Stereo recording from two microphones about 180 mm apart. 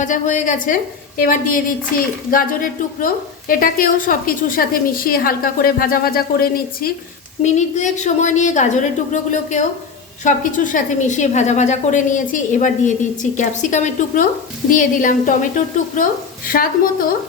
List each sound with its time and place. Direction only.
0.0 s a woman's voice: 45° left (ahead or behind)
7.4 s a woman's voice: 40° left (ahead or behind)